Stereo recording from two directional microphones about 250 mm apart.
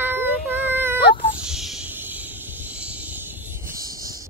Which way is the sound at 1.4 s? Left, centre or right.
Centre.